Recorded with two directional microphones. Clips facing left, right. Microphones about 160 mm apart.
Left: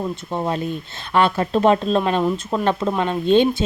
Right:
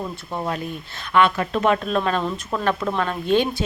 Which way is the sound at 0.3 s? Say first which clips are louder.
Left 3 dB; 20° left (ahead or behind).